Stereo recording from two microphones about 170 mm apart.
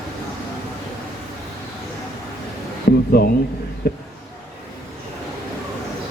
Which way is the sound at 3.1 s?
60° left (ahead or behind).